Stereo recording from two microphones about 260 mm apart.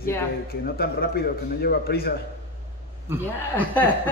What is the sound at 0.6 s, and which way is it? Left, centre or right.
Speech, left.